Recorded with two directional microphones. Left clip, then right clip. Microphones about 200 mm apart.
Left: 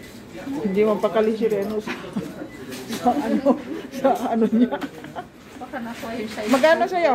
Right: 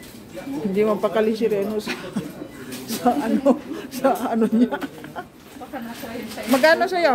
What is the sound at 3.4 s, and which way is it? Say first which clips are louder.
Speech: right 1 dB; 15° right (ahead or behind).